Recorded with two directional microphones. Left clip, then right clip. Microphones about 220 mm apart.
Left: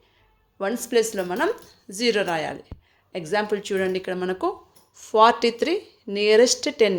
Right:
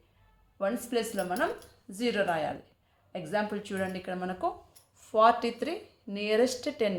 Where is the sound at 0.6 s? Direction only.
35° left (ahead or behind).